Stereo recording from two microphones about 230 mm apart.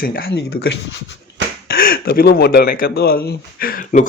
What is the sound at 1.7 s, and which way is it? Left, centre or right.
Speech, left.